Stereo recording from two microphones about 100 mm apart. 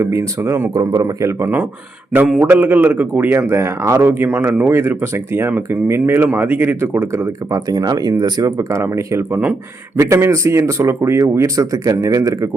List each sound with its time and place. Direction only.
0.0 s speech: 25° right (ahead or behind)
7.5 s speech: 40° right (ahead or behind)